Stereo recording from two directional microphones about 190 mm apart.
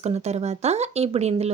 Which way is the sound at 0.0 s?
35° right (ahead or behind).